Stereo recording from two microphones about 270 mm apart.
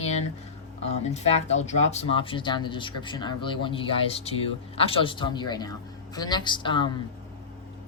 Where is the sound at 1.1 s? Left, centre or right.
Left.